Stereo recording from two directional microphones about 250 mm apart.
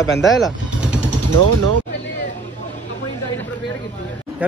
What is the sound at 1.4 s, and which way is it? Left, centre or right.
Speech, right.